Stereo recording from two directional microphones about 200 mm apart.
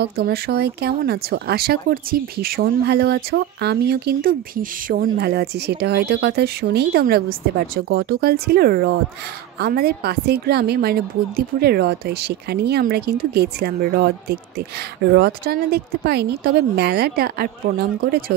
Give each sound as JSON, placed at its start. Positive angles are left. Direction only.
{"t": 0.0, "sound": "speech", "side_deg": -55}